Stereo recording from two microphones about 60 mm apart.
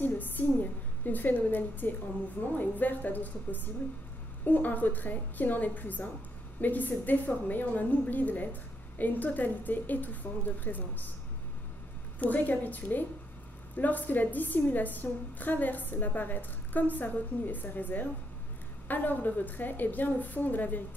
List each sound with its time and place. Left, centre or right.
0.0 s a woman's voice: left
12.2 s a woman's voice: left